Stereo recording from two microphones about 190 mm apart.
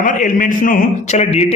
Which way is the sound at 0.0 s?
45° left (ahead or behind).